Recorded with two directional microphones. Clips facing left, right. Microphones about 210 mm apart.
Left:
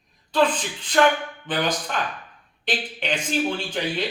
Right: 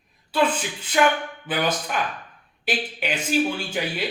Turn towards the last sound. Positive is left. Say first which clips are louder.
# left 1 dB
turn(degrees=-10)  # may be behind; listen again after turning